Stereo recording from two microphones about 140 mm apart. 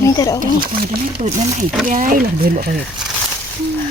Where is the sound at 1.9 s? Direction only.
75° right (ahead or behind).